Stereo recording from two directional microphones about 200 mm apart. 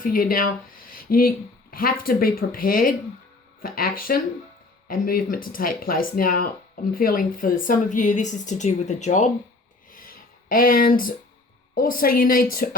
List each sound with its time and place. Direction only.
0.0 s speech: 45° left (ahead or behind)
9.9 s a sound: 45° left (ahead or behind)
11.7 s speech: 45° left (ahead or behind)